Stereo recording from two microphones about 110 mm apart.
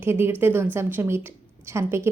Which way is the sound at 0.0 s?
20° right (ahead or behind).